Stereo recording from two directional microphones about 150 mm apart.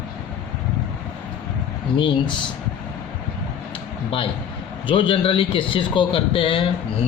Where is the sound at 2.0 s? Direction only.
30° left (ahead or behind).